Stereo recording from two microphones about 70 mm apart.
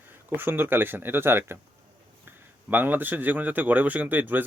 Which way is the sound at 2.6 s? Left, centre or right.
Right.